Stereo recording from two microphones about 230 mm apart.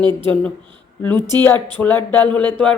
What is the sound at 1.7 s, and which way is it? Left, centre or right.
Speech, centre.